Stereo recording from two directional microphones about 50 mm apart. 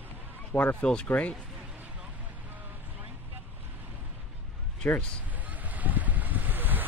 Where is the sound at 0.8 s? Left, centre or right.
Left.